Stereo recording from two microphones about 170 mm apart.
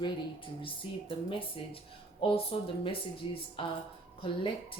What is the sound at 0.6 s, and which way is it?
Speech, 30° left (ahead or behind).